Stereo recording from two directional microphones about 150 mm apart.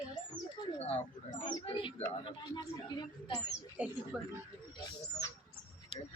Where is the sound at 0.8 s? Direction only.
45° left (ahead or behind).